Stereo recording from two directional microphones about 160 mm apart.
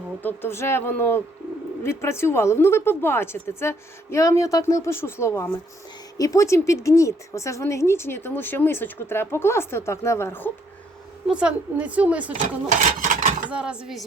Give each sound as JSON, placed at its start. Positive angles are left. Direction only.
{"t": 0.2, "sound": "speech", "side_deg": 15}
{"t": 11.3, "sound": "a woman's voice", "side_deg": -5}
{"t": 12.6, "sound": "speech", "side_deg": -55}
{"t": 13.5, "sound": "speech", "side_deg": -5}